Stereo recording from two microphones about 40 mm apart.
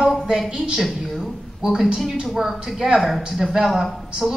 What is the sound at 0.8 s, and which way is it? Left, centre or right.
Speech, centre.